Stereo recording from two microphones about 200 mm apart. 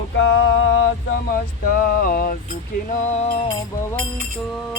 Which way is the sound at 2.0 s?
45° left (ahead or behind).